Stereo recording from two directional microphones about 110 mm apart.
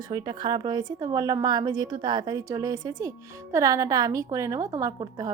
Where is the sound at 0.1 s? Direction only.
40° right (ahead or behind).